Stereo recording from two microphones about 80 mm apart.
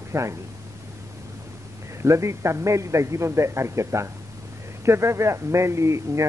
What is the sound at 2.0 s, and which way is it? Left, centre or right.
Speech, right.